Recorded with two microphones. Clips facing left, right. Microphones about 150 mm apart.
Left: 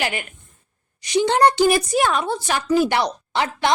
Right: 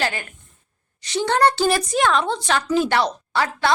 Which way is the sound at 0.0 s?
15° left (ahead or behind).